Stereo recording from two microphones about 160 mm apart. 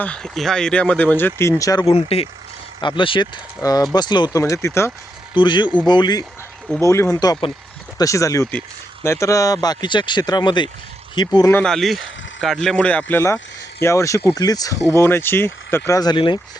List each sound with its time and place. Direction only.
0.0 s speech: 5° left (ahead or behind); by 1.9 s 20° left (ahead or behind)
1.9 s a man's voice: 40° left (ahead or behind); by 4.9 s 15° left (ahead or behind)
5.3 s a man's voice: 30° left (ahead or behind)
6.7 s speech: 15° left (ahead or behind)
11.3 s speech: 20° left (ahead or behind)
11.6 s speech: centre (ahead or behind); by 16.4 s 30° left (ahead or behind)